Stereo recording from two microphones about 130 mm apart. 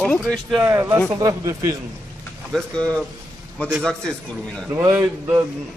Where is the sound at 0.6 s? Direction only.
20° right (ahead or behind).